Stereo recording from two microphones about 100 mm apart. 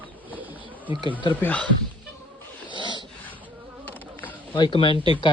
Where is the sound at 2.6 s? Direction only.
50° left (ahead or behind).